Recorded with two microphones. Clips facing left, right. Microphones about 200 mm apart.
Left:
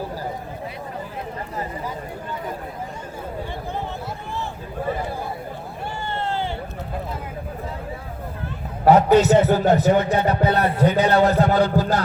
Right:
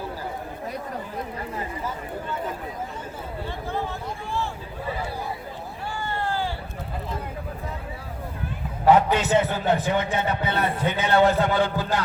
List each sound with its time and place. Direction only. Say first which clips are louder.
4.8 s chatter: left 5 dB; 45° left (ahead or behind)
6.0 s a sound: left 1 dB; 25° left (ahead or behind)
8.8 s a man's voice: left 5 dB; 40° left (ahead or behind)